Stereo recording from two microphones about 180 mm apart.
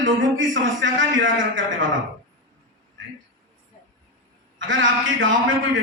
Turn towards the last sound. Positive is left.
turn(degrees=-90)